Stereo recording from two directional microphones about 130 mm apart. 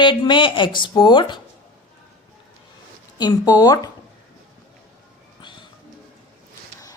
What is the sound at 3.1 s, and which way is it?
Speech, 30° left (ahead or behind).